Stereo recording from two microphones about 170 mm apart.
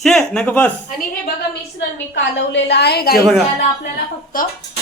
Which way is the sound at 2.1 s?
90° left.